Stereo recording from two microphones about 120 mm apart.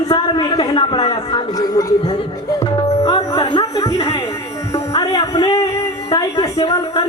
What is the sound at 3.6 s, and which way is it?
Speech, 30° left (ahead or behind).